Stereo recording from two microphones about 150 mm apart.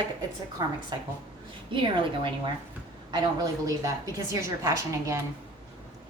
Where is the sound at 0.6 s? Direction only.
25° right (ahead or behind).